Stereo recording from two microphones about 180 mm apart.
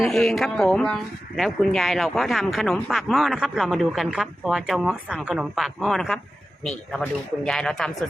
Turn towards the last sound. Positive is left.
turn(degrees=5)  # may be behind; listen again after turning